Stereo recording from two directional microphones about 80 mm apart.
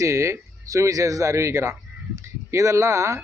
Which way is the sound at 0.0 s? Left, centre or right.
Right.